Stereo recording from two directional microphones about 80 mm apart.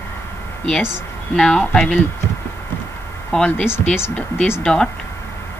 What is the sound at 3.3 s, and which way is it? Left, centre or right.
Speech, centre.